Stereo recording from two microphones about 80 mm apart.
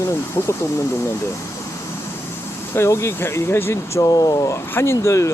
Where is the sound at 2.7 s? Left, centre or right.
Left.